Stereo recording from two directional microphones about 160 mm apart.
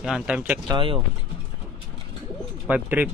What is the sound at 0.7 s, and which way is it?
Speech, 30° right (ahead or behind).